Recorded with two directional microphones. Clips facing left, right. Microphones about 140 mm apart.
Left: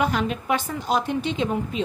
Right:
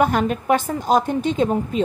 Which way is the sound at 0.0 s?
50° right (ahead or behind).